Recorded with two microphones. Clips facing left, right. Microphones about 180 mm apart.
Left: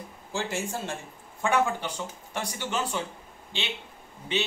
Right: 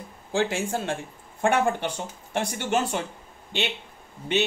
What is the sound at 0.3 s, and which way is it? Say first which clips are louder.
Speech: right 6 dB; 60° right (ahead or behind).